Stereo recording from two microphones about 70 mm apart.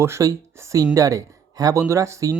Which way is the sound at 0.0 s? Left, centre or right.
Right.